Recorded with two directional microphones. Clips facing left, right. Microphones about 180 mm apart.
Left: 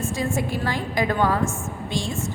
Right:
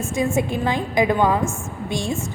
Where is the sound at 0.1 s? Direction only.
20° right (ahead or behind).